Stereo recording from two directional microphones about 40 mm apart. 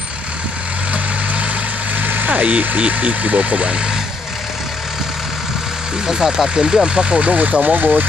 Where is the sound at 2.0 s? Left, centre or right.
Right.